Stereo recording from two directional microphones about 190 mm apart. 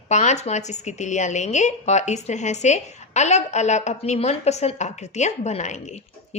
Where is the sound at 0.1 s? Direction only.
40° left (ahead or behind).